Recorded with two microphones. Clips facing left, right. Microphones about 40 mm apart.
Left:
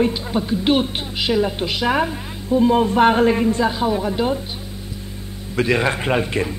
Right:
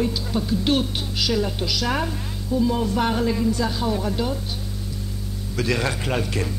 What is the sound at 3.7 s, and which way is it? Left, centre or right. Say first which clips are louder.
Speech: left 4 dB; left.